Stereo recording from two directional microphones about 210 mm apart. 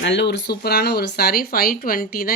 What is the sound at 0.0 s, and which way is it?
Speech, 55° left (ahead or behind).